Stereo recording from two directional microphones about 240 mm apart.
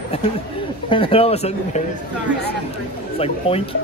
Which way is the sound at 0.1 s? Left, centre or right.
Left.